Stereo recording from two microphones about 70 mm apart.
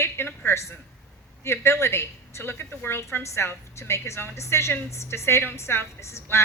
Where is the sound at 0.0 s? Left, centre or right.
Left.